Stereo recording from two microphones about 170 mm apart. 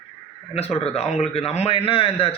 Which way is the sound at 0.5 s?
40° left (ahead or behind).